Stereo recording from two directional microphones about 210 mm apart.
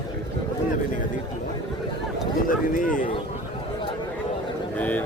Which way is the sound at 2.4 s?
40° left (ahead or behind).